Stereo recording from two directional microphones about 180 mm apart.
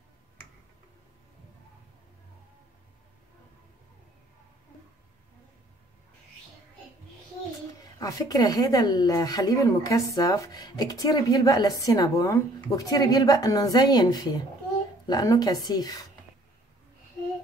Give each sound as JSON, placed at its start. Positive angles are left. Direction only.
{"t": 8.0, "sound": "speech", "side_deg": 20}